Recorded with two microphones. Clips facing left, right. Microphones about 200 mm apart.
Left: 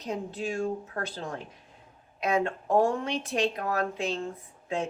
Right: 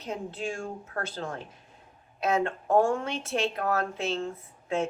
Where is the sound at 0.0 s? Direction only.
15° left (ahead or behind).